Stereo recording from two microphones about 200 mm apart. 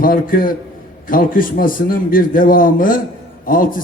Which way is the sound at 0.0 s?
45° left (ahead or behind).